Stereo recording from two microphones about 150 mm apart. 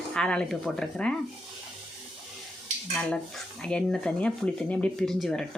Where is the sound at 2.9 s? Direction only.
5° left (ahead or behind).